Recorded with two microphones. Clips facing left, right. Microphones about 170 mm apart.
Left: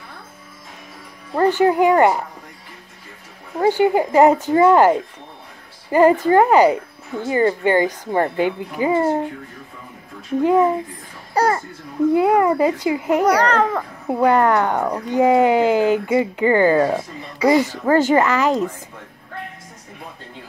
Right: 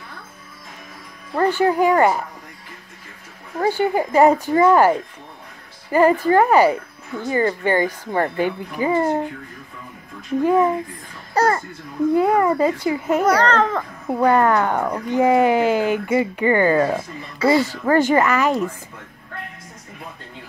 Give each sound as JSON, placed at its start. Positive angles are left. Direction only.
{"t": 1.3, "sound": "speech", "side_deg": 15}
{"t": 3.5, "sound": "speech", "side_deg": 15}
{"t": 11.3, "sound": "babbling", "side_deg": 10}
{"t": 12.1, "sound": "speech", "side_deg": 15}